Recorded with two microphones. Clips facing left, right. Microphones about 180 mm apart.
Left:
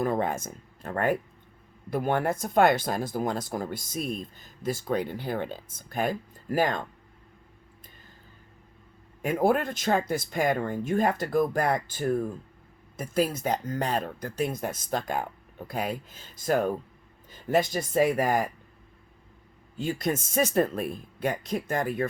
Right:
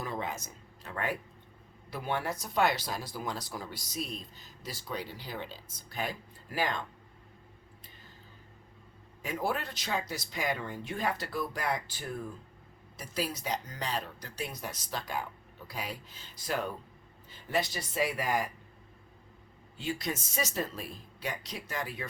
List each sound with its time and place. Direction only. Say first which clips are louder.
0.0 s speech: left 10 dB; 50° left (ahead or behind)
9.2 s speech: left 10 dB; 55° left (ahead or behind)
19.7 s speech: left 7 dB; 45° left (ahead or behind)